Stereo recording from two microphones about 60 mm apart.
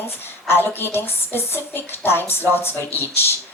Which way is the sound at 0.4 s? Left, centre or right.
Left.